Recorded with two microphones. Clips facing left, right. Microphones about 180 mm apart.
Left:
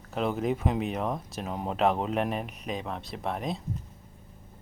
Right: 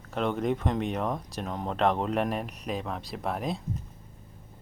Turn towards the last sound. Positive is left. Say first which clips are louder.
# right 1 dB
turn(degrees=0)  # may be behind; listen again after turning